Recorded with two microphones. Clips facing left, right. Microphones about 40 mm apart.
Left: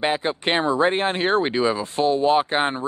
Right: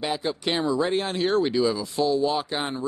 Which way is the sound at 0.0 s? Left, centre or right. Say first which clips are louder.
Left 4 dB; left.